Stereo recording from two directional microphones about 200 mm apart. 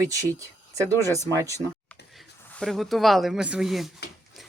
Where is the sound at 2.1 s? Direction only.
Centre (ahead or behind).